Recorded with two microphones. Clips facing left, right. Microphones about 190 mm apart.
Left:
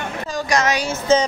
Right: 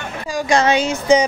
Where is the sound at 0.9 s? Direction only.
15° right (ahead or behind).